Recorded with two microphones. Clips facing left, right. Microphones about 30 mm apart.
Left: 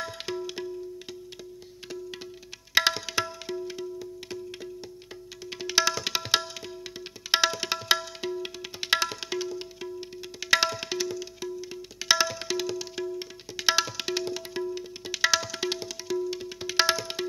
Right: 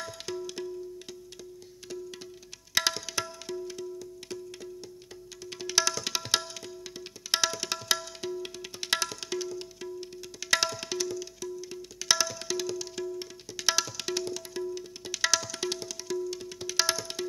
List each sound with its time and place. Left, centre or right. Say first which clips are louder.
0.0 s music: left 3 dB; left
2.7 s tabla: left 5 dB; centre